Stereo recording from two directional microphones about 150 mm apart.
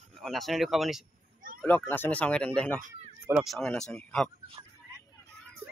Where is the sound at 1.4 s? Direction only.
65° right (ahead or behind).